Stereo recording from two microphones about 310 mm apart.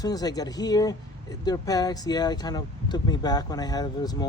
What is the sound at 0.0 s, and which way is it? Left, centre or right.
Speech, centre.